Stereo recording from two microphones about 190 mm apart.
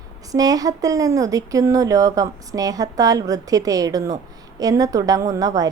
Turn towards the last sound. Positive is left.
turn(degrees=-20)  # may be behind; listen again after turning